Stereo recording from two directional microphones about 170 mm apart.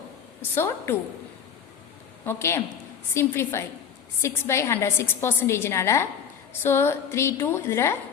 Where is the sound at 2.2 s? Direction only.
15° left (ahead or behind).